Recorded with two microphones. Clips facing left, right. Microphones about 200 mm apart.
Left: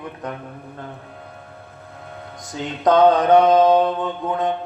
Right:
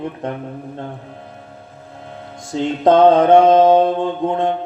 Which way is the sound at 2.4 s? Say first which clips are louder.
Right 5 dB; 25° right (ahead or behind).